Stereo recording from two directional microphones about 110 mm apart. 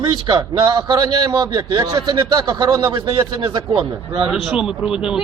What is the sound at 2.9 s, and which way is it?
A man's voice, 50° right (ahead or behind).